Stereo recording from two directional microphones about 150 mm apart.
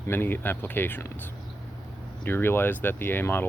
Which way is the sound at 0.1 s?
15° left (ahead or behind).